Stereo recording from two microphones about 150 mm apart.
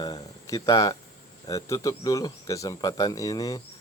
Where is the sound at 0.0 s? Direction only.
25° left (ahead or behind).